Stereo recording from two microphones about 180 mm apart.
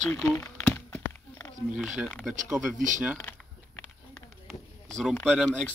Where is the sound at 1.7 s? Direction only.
5° right (ahead or behind).